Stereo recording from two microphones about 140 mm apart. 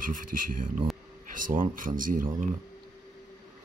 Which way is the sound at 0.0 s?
75° right (ahead or behind).